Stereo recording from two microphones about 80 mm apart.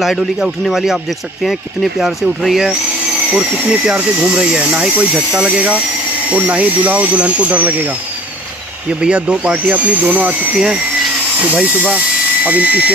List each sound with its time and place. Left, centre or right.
0.0 s speech: centre
9.0 s speech: centre